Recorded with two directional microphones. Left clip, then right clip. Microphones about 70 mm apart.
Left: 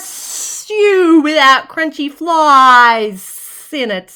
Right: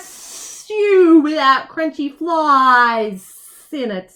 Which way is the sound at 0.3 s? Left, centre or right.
Left.